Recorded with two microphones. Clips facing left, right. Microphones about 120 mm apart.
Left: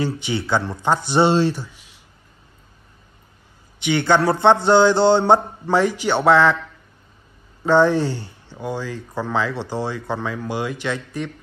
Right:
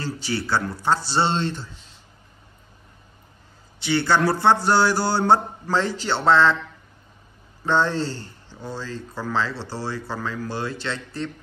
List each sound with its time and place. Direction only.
0.1 s speech: 20° left (ahead or behind)
3.8 s speech: 20° left (ahead or behind)
7.6 s speech: 15° left (ahead or behind)